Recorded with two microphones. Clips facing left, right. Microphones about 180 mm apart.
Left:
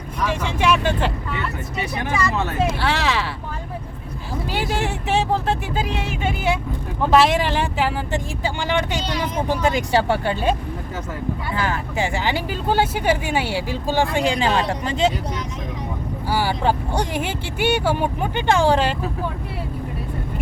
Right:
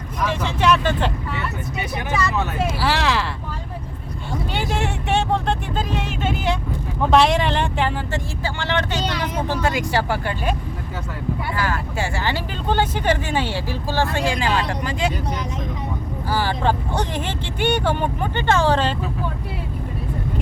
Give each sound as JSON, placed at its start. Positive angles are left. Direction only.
{"t": 0.3, "sound": "speech", "side_deg": 10}
{"t": 2.6, "sound": "speech", "side_deg": 0}
{"t": 4.5, "sound": "speech", "side_deg": 0}
{"t": 8.1, "sound": "speech", "side_deg": 15}
{"t": 11.5, "sound": "speech", "side_deg": 20}
{"t": 16.3, "sound": "speech", "side_deg": 10}